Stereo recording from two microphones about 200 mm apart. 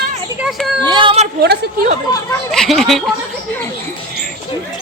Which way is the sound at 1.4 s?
55° right (ahead or behind).